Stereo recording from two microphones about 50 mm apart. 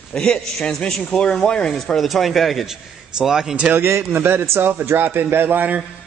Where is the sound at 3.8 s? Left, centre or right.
Right.